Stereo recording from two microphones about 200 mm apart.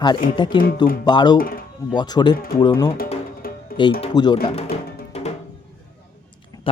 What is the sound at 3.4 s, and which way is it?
Music, 50° left (ahead or behind).